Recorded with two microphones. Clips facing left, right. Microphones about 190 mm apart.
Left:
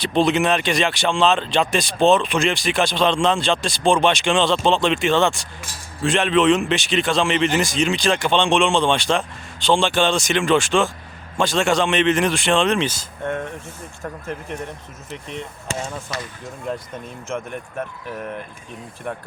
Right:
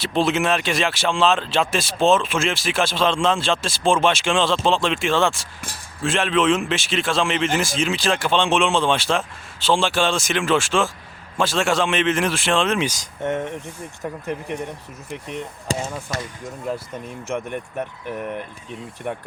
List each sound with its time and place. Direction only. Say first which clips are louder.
0.0 s speech: left 2 dB; centre (ahead or behind)
15.7 s speech: right 3 dB; 35° right (ahead or behind)
16.1 s speech: right 2 dB; 50° right (ahead or behind)
16.7 s speech: even; 5° right (ahead or behind)